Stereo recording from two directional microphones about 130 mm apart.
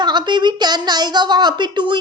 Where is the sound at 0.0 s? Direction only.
35° right (ahead or behind).